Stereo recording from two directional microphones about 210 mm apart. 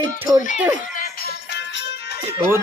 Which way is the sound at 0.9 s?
50° left (ahead or behind).